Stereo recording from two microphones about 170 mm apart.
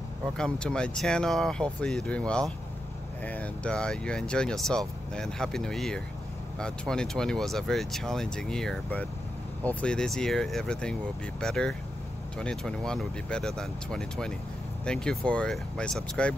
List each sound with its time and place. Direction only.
0.2 s speech: 5° left (ahead or behind)